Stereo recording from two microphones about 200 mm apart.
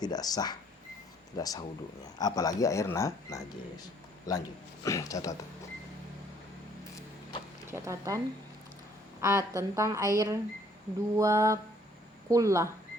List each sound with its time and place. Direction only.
0.0 s speech: 20° left (ahead or behind)
7.7 s speech: 15° right (ahead or behind)
9.2 s speech: 15° right (ahead or behind)